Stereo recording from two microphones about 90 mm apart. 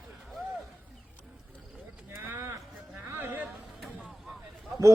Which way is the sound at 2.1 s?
25° right (ahead or behind).